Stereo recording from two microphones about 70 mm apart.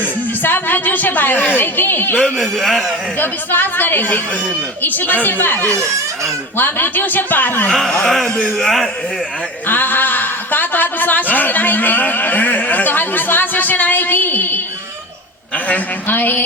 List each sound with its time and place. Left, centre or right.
0.4 s a woman's voice: left
2.2 s speech: centre
3.2 s a woman's voice: left
7.7 s speech: centre
9.6 s a woman's voice: left